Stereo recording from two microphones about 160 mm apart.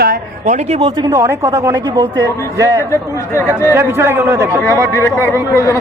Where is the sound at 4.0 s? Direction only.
15° right (ahead or behind).